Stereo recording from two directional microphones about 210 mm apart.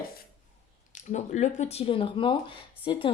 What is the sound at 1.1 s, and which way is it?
Speech, 35° left (ahead or behind).